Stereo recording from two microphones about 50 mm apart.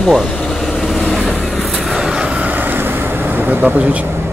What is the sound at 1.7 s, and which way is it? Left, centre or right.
Vehicle, centre.